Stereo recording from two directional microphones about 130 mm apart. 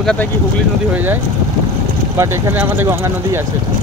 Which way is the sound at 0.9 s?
15° right (ahead or behind).